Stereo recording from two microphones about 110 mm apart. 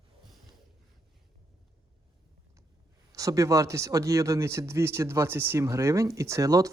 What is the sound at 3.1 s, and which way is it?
Speech, 30° right (ahead or behind).